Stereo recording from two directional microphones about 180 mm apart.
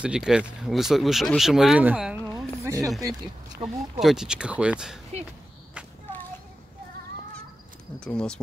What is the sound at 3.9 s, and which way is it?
Speech, 5° right (ahead or behind).